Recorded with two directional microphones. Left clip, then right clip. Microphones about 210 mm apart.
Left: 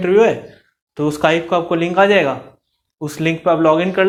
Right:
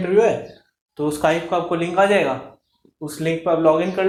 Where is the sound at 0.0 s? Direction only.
40° left (ahead or behind).